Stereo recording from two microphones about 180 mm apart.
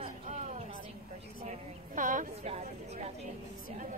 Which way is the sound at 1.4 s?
45° right (ahead or behind).